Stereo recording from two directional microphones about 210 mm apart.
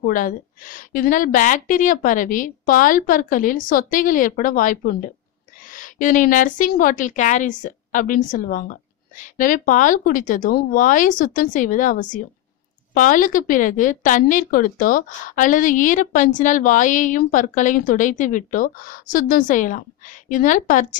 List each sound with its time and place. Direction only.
0.0 s a woman's voice: 40° left (ahead or behind)